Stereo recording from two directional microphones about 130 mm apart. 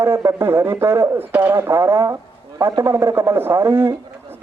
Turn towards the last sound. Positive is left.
turn(degrees=-15)  # may be behind; listen again after turning